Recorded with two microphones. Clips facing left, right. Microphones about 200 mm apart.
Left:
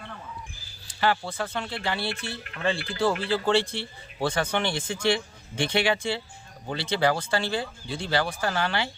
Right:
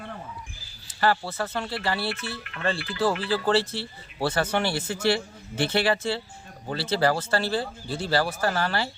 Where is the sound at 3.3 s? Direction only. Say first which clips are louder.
Even; 5° right (ahead or behind).